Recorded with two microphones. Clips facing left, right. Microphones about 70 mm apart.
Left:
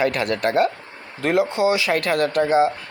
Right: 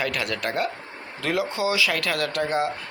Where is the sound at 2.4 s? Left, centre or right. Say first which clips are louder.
Left 8 dB; centre.